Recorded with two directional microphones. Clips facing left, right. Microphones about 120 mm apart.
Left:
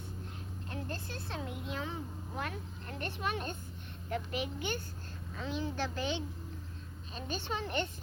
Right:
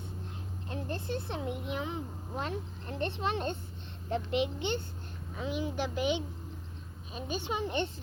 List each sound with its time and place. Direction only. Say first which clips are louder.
0.7 s speech: right 6 dB; 20° right (ahead or behind)
5.4 s speech: right 3 dB; 15° right (ahead or behind)